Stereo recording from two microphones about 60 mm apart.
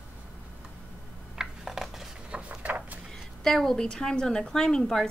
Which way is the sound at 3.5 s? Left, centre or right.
Centre.